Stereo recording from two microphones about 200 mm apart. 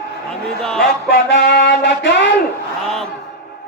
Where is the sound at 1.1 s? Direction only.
55° left (ahead or behind).